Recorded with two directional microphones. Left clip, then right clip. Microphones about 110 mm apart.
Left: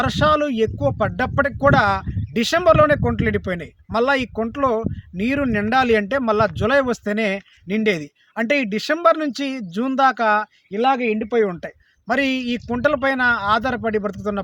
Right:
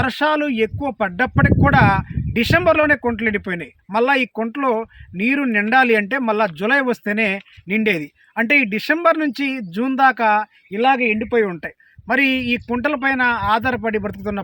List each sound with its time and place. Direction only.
0.0 s speech: 45° left (ahead or behind)